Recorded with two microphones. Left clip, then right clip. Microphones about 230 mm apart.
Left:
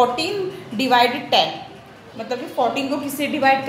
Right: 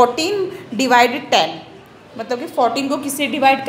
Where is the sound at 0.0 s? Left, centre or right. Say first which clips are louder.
Right 4 dB; right.